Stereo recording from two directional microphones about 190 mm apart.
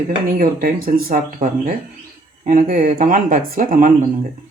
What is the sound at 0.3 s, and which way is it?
Speech, 50° right (ahead or behind).